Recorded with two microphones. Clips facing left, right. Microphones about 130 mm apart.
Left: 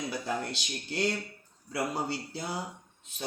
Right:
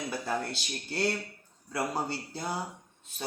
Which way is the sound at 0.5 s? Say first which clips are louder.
Even; 45° right (ahead or behind).